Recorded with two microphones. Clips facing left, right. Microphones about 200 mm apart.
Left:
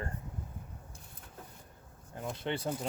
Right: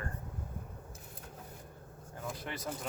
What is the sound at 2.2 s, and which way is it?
Speech, 25° left (ahead or behind).